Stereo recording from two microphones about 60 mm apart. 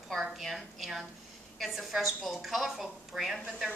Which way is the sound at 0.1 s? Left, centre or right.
Centre.